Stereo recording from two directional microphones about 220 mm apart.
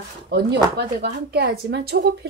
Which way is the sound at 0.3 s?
45° right (ahead or behind).